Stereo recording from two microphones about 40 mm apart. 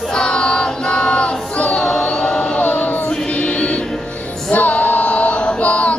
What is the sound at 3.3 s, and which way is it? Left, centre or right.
Music, left.